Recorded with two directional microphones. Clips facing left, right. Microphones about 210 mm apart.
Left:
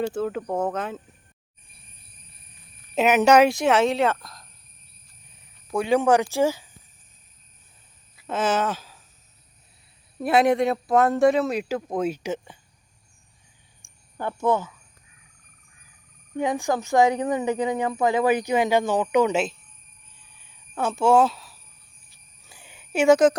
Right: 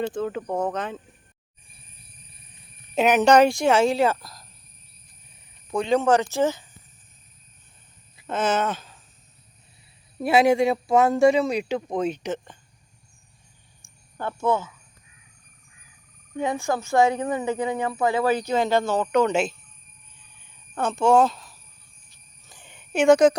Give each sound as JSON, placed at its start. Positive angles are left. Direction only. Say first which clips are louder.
{"t": 0.0, "sound": "speech", "louder": "left 1 dB", "side_deg": 5}
{"t": 2.9, "sound": "speech", "louder": "even", "side_deg": 5}
{"t": 8.3, "sound": "speech", "louder": "even", "side_deg": 5}
{"t": 10.2, "sound": "speech", "louder": "right 1 dB", "side_deg": 0}
{"t": 13.8, "sound": "a sound", "louder": "right 3 dB", "side_deg": -5}
{"t": 14.2, "sound": "speech", "louder": "left 1 dB", "side_deg": 15}
{"t": 16.4, "sound": "speech", "louder": "left 1 dB", "side_deg": 15}
{"t": 20.4, "sound": "a sound", "louder": "even", "side_deg": 5}